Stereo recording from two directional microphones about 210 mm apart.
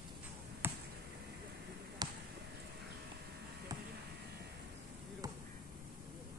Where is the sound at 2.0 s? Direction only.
20° right (ahead or behind).